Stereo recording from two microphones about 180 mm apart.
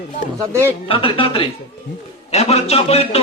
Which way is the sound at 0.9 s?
30° left (ahead or behind).